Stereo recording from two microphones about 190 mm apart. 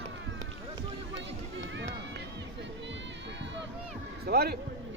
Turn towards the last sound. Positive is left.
turn(degrees=-55)  # may be behind; listen again after turning